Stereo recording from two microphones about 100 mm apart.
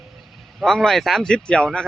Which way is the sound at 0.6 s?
5° left (ahead or behind).